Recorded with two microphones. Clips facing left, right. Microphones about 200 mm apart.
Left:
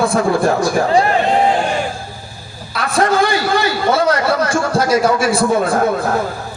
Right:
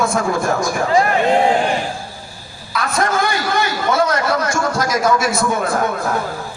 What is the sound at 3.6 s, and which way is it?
A man's voice, 30° left (ahead or behind).